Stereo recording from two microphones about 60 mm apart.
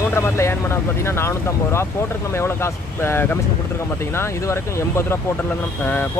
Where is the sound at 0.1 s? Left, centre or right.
Left.